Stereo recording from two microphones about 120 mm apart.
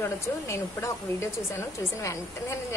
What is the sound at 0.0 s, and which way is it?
Speech, 20° left (ahead or behind).